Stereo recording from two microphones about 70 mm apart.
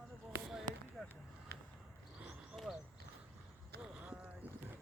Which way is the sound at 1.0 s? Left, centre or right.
Centre.